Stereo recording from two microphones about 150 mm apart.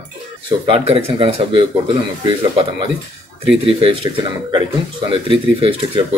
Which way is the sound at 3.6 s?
35° right (ahead or behind).